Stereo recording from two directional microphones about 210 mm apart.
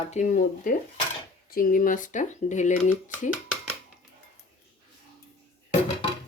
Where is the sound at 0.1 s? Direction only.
35° left (ahead or behind).